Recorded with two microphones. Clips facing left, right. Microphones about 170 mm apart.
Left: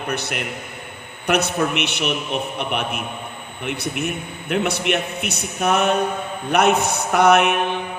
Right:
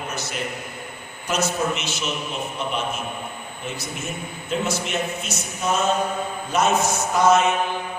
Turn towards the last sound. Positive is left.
turn(degrees=65)  # may be behind; listen again after turning